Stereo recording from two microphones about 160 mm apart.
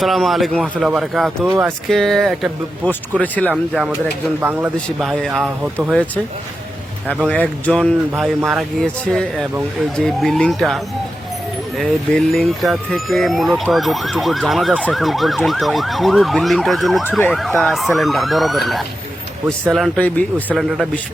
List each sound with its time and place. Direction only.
0.0 s speech: centre (ahead or behind)
1.5 s speech: 15° right (ahead or behind)
1.9 s speech: centre (ahead or behind)
3.5 s speech: 5° right (ahead or behind)
4.9 s speech: centre (ahead or behind)
7.3 s speech: 10° left (ahead or behind)
11.8 s speech: centre (ahead or behind)
17.0 s speech: 15° left (ahead or behind)
17.3 s speech: centre (ahead or behind)